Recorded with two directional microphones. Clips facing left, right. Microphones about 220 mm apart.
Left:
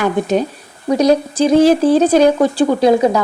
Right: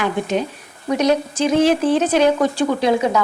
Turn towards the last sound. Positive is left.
turn(degrees=35)  # may be behind; listen again after turning